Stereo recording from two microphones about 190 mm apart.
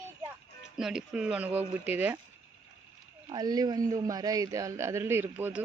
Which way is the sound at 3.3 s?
20° right (ahead or behind).